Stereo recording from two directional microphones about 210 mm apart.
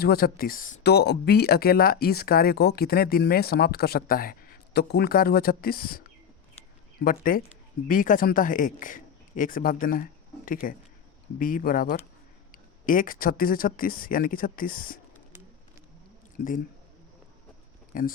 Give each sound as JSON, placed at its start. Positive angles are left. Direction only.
{"t": 0.0, "sound": "a man's voice", "side_deg": 45}
{"t": 16.4, "sound": "speech", "side_deg": 45}
{"t": 17.9, "sound": "speech", "side_deg": 40}